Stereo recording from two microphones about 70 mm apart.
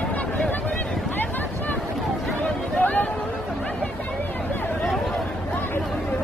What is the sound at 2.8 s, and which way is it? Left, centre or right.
Chatter, left.